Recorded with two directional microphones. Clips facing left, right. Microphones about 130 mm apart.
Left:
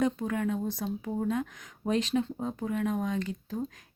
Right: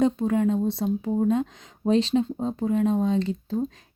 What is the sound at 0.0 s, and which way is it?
Speech, 25° right (ahead or behind).